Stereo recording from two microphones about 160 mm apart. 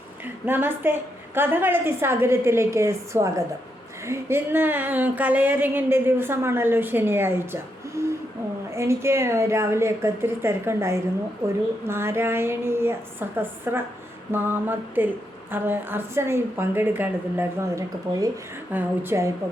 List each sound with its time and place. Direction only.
0.4 s speech: 15° right (ahead or behind)